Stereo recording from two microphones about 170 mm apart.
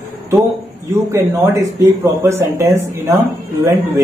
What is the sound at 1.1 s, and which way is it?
Speech, 15° right (ahead or behind).